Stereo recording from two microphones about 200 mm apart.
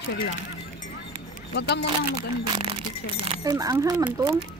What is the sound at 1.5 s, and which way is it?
Speech, 60° left (ahead or behind).